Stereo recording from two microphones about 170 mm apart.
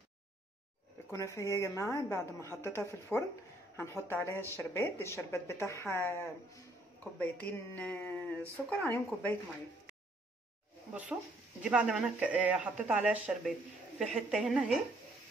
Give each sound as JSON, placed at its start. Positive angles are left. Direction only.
{"t": 1.1, "sound": "speech", "side_deg": 15}
{"t": 10.9, "sound": "speech", "side_deg": -5}